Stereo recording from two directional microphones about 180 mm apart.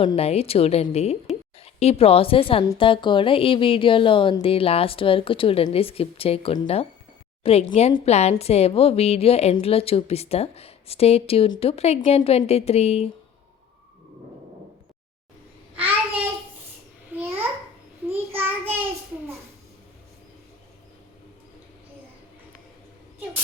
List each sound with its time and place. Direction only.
0.0 s a woman's voice: 35° left (ahead or behind)
15.7 s child singing: 10° right (ahead or behind)
17.1 s babbling: 10° right (ahead or behind)
18.3 s child singing: 10° right (ahead or behind)